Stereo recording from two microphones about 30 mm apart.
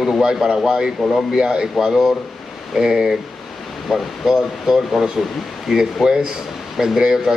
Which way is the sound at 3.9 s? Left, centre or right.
Centre.